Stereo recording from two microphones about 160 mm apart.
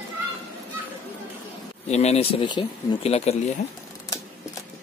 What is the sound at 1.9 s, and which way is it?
Speech, 40° left (ahead or behind).